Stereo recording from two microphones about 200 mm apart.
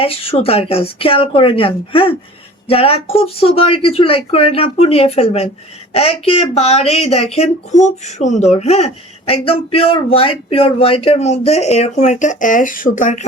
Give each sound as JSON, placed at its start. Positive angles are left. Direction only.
{"t": 0.0, "sound": "speech", "side_deg": 30}